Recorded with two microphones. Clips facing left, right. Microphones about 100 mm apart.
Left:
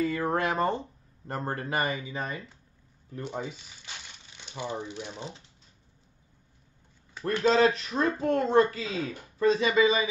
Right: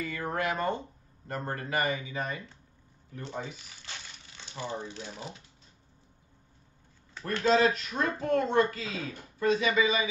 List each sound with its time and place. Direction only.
0.0 s speech: 30° left (ahead or behind)
3.2 s speech: 15° left (ahead or behind)
7.4 s speech: 30° left (ahead or behind)